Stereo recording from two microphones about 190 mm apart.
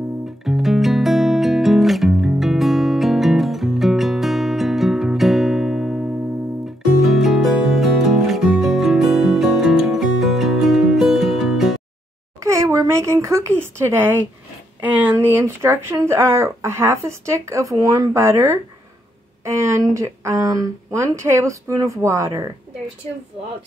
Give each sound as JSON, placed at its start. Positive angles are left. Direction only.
{"t": 0.4, "sound": "music", "side_deg": 0}
{"t": 7.2, "sound": "music", "side_deg": 0}
{"t": 12.4, "sound": "a sound", "side_deg": -15}
{"t": 14.9, "sound": "speech", "side_deg": -10}